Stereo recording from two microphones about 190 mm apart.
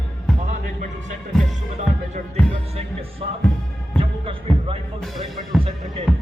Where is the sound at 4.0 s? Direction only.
30° right (ahead or behind).